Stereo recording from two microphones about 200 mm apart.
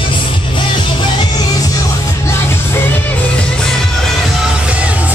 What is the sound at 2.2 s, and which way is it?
Music, 10° left (ahead or behind).